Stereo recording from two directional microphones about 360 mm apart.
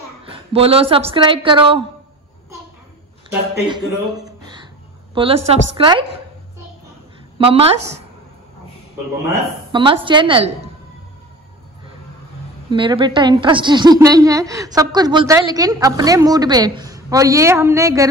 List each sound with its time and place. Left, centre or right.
0.2 s a woman's voice: centre
3.3 s a man's voice: centre
4.1 s a sound: centre
5.1 s a woman's voice: centre
7.3 s a woman's voice: centre
9.7 s a woman's voice: centre
12.6 s a woman's voice: centre